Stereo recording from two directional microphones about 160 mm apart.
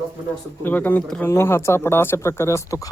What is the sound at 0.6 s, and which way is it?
Speech, 10° left (ahead or behind).